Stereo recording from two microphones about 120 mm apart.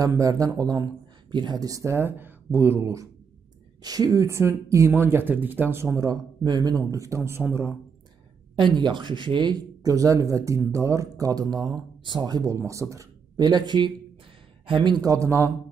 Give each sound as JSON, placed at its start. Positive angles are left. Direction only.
{"t": 0.0, "sound": "speech", "side_deg": -30}
{"t": 5.9, "sound": "speech", "side_deg": -35}
{"t": 8.5, "sound": "speech", "side_deg": -40}
{"t": 12.5, "sound": "speech", "side_deg": -25}